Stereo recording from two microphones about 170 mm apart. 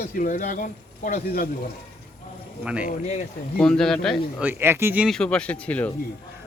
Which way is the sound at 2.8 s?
50° left (ahead or behind).